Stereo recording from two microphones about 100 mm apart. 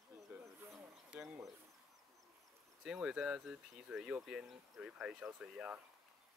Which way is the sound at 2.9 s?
5° right (ahead or behind).